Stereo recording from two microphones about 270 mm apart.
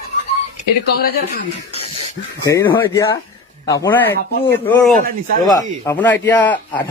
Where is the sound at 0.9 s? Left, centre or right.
Left.